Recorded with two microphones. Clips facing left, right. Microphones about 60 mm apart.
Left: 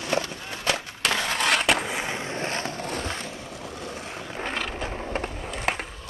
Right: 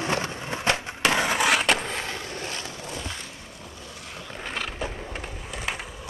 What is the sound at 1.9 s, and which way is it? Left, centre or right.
Skateboard, left.